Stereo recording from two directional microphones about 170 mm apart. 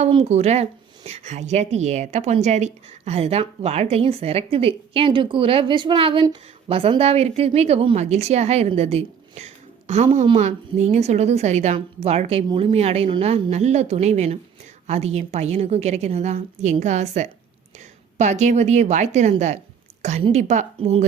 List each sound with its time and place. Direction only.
0.0 s a woman's voice: 35° right (ahead or behind)